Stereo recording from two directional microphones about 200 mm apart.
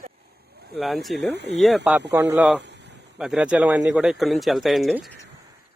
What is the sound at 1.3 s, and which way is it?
Speech, 60° right (ahead or behind).